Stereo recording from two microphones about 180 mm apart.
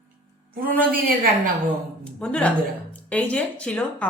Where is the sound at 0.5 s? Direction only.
55° right (ahead or behind).